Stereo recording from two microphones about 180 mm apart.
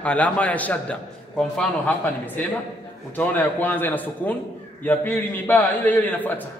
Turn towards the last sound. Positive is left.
turn(degrees=10)  # may be behind; listen again after turning